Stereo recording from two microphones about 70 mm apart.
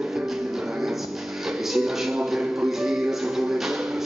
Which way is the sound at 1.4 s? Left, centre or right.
Centre.